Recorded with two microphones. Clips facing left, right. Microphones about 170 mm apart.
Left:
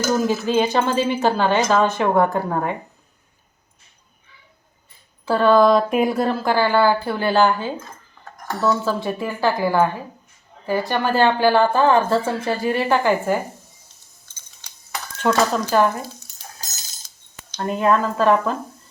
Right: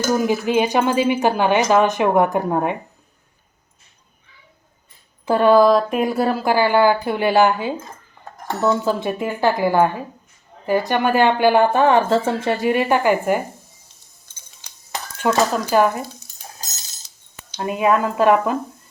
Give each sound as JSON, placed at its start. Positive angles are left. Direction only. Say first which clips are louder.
{"t": 0.1, "sound": "speech", "louder": "right 1 dB", "side_deg": -15}
{"t": 5.2, "sound": "speech", "louder": "right 2 dB", "side_deg": -15}
{"t": 15.5, "sound": "speech", "louder": "right 1 dB", "side_deg": -10}
{"t": 17.5, "sound": "speech", "louder": "right 1 dB", "side_deg": -10}